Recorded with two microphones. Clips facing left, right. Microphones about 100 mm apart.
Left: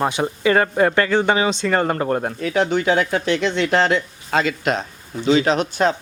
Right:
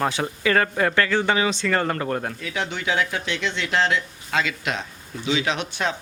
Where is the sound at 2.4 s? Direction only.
45° left (ahead or behind).